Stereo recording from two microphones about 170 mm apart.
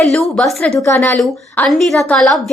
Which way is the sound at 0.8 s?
15° left (ahead or behind).